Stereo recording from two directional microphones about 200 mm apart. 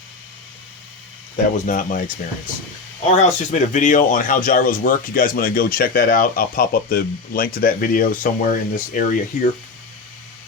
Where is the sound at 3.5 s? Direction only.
40° left (ahead or behind).